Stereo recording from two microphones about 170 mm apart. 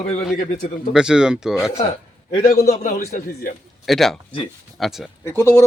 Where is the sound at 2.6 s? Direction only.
40° left (ahead or behind).